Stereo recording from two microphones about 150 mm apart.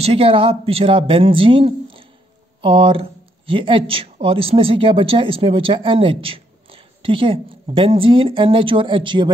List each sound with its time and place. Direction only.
0.0 s speech: 40° right (ahead or behind)